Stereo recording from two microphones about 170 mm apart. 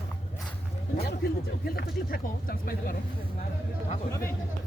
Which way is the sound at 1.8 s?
60° left (ahead or behind).